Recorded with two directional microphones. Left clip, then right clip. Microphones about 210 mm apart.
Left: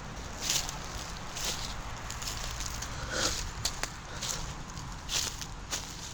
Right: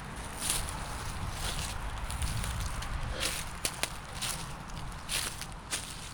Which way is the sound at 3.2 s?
20° right (ahead or behind).